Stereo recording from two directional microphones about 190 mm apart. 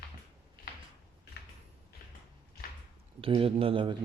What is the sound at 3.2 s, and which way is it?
Speech, 30° right (ahead or behind).